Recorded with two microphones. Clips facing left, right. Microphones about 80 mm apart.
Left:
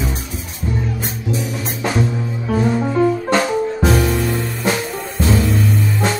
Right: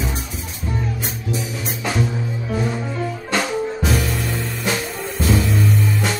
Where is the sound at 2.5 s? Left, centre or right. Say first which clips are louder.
Left 8 dB; left.